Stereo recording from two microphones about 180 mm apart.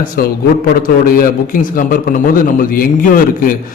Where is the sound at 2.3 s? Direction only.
50° left (ahead or behind).